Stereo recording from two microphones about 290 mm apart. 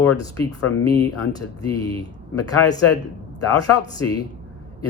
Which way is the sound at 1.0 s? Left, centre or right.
Centre.